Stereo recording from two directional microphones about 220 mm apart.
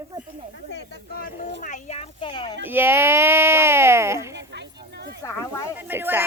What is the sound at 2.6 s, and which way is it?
Speech, 10° right (ahead or behind).